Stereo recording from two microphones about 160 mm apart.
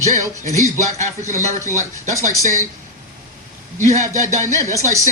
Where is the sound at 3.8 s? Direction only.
50° right (ahead or behind).